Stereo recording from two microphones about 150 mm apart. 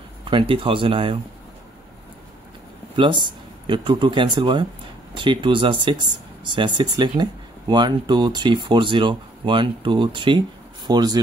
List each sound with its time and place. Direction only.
0.2 s speech: 35° right (ahead or behind)
3.0 s speech: 30° right (ahead or behind)